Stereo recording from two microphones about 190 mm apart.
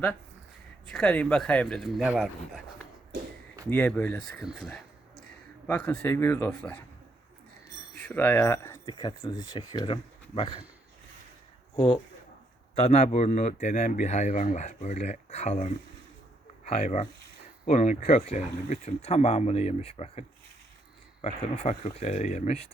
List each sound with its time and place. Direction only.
0.9 s speech: 5° left (ahead or behind)
3.7 s speech: 10° left (ahead or behind)
7.9 s speech: 10° left (ahead or behind); by 10.6 s 30° left (ahead or behind)
12.7 s speech: 35° left (ahead or behind)